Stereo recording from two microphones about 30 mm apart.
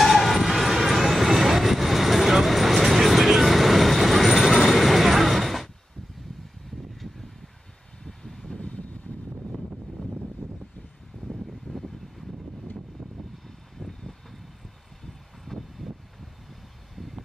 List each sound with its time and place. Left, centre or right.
0.0 s train: centre
4.6 s vehicle: centre
8.0 s vehicle: centre
8.5 s vehicle: left
13.7 s vehicle: centre
15.4 s vehicle: centre
16.9 s vehicle: centre